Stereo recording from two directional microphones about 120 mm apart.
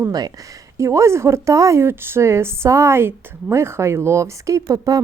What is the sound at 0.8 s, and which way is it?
A woman's voice, 25° right (ahead or behind).